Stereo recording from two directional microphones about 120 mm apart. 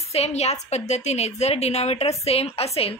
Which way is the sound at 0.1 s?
60° left (ahead or behind).